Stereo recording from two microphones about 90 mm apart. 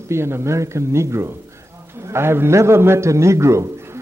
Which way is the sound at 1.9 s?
30° right (ahead or behind).